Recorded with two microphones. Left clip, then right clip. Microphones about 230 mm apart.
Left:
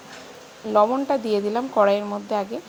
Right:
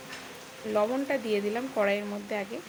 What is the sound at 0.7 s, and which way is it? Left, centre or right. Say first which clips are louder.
Speech: left 9 dB; left.